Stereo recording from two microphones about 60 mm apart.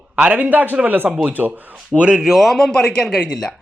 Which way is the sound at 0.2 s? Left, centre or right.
Right.